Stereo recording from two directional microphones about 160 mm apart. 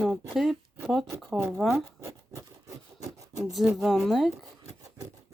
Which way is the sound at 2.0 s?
20° right (ahead or behind).